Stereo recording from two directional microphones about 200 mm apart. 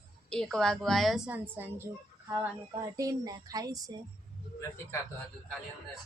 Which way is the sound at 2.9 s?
20° right (ahead or behind).